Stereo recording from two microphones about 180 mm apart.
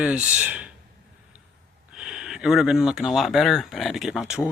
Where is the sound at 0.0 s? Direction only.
5° right (ahead or behind).